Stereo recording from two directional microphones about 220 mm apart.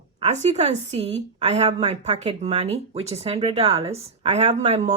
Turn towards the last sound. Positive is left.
turn(degrees=-30)  # may be behind; listen again after turning